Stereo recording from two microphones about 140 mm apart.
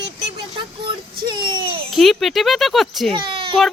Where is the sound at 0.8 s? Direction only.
35° right (ahead or behind).